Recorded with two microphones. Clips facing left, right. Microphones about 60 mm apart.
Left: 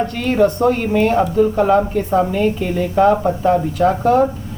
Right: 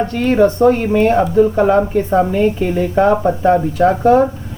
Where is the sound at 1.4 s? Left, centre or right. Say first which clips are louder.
Right 2 dB; centre.